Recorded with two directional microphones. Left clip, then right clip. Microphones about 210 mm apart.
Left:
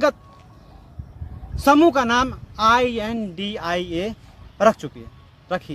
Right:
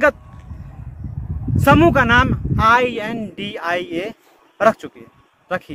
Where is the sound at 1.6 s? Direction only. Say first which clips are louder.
Right 2 dB; 5° left (ahead or behind).